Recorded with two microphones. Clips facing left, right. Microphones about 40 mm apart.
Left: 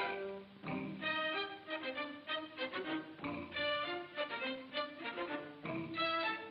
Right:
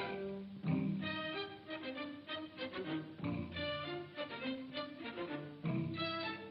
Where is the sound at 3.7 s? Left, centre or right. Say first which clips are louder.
Left 3 dB; left; by 6.1 s centre.